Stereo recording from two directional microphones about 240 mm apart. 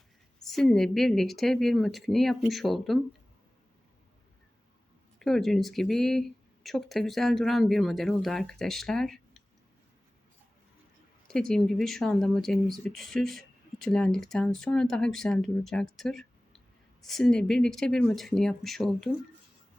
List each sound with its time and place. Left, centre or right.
0.4 s speech: centre
5.2 s speech: centre
11.3 s speech: centre